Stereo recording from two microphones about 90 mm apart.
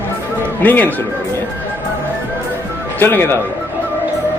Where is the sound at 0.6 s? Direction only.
20° left (ahead or behind).